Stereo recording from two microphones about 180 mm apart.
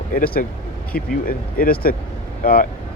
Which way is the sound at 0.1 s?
50° left (ahead or behind).